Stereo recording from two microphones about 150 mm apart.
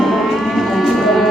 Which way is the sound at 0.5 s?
Centre (ahead or behind).